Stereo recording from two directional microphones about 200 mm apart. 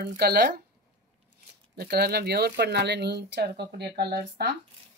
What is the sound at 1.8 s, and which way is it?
Speech, 50° right (ahead or behind).